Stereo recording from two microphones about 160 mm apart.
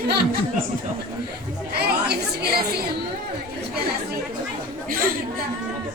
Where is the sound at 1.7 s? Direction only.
90° right.